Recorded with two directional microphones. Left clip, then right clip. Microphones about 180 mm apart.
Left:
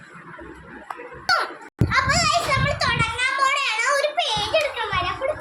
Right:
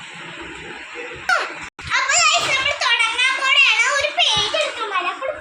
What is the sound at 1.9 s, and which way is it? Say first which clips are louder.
Children playing: right 3 dB; 20° left (ahead or behind).